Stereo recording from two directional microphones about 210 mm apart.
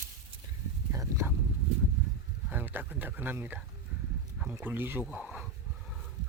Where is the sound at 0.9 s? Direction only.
15° right (ahead or behind).